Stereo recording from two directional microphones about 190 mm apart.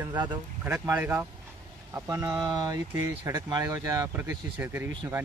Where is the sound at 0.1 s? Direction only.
25° right (ahead or behind).